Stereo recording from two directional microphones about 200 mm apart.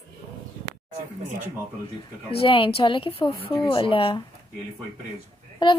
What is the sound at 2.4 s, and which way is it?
Speech, 25° left (ahead or behind).